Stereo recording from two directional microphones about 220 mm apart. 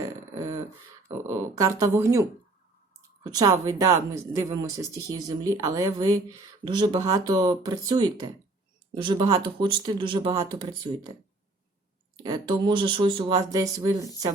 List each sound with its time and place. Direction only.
1.3 s speech: 15° right (ahead or behind)
3.2 s speech: 15° right (ahead or behind)
12.1 s speech: 20° right (ahead or behind)